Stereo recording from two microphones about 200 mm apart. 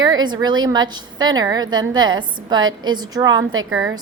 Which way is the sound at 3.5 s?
90° right.